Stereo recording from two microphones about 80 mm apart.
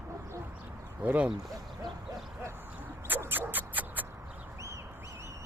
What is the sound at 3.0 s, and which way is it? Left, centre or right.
Dog, right.